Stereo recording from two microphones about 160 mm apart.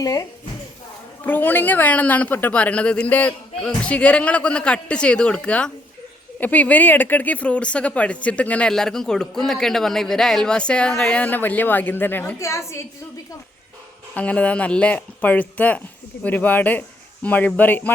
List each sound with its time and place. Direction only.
0.0 s speech: 20° left (ahead or behind)
14.1 s speech: 10° left (ahead or behind)